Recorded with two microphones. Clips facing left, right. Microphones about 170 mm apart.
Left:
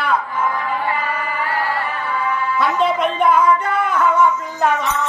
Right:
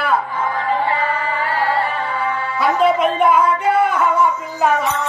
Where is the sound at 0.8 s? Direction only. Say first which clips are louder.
Right 3 dB; 25° right (ahead or behind).